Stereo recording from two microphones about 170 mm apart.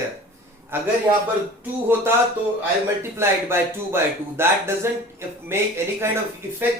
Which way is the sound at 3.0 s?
15° right (ahead or behind).